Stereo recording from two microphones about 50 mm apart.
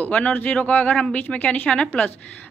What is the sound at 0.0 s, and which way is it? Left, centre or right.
A woman's voice, left.